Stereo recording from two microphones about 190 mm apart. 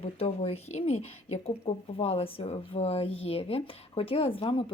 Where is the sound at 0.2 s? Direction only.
30° left (ahead or behind).